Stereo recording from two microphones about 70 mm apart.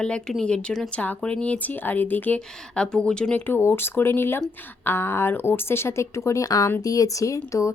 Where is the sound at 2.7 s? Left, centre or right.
Centre.